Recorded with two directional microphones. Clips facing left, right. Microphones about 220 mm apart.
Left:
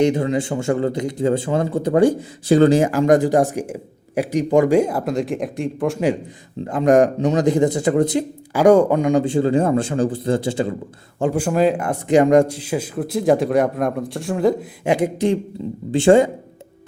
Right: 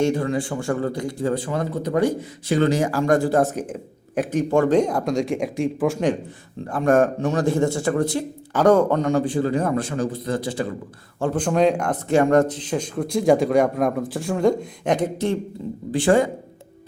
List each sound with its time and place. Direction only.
0.0 s a man's voice: 20° left (ahead or behind); by 6.1 s 5° left (ahead or behind)
6.7 s a man's voice: 20° left (ahead or behind)
9.2 s a man's voice: 25° left (ahead or behind)
11.2 s speech: 10° left (ahead or behind)
12.0 s speech: 15° left (ahead or behind)
15.9 s a man's voice: 25° left (ahead or behind)